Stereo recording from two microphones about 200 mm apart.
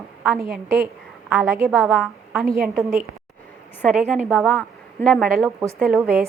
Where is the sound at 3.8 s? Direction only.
Centre (ahead or behind).